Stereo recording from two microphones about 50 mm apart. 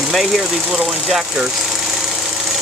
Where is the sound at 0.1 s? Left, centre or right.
Centre.